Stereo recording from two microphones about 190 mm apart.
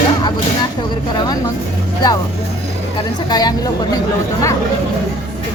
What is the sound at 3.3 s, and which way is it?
Speech, 20° left (ahead or behind).